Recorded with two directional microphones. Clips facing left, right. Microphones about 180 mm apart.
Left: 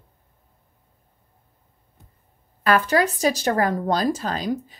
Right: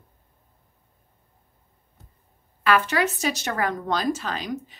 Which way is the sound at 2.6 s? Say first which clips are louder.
Left 3 dB; 35° left (ahead or behind).